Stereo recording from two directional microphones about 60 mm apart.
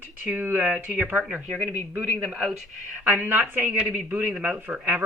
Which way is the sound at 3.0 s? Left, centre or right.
Right.